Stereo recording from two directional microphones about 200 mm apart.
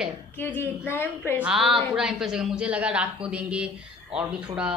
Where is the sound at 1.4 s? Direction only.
Centre (ahead or behind).